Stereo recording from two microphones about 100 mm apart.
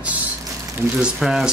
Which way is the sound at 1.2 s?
5° right (ahead or behind).